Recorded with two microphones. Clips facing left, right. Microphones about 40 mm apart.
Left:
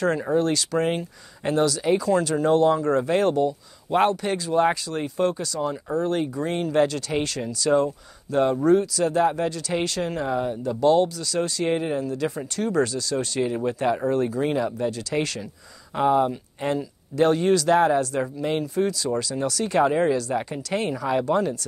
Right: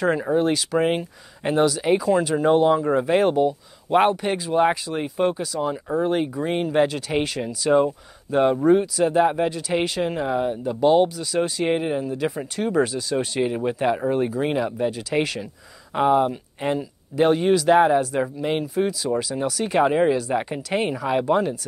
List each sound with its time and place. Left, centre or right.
0.0 s speech: centre